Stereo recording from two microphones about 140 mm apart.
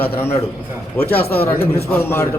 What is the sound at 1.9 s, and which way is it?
Speech, 15° left (ahead or behind).